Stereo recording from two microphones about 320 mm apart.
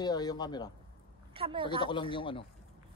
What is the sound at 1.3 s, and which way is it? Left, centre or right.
Speech, centre.